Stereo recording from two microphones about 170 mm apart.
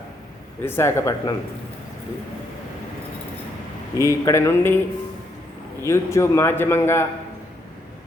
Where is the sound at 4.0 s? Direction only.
15° left (ahead or behind).